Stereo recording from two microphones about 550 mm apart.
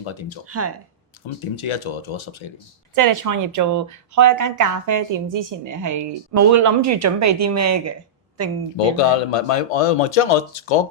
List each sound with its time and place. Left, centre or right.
0.0 s speech: left
0.4 s speech: right
1.4 s speech: left
2.9 s speech: right
9.0 s speech: left